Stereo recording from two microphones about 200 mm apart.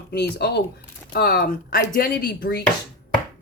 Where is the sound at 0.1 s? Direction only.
55° left (ahead or behind).